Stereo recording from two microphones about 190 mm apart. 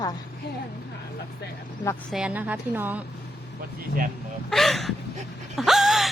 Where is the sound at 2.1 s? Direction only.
5° right (ahead or behind).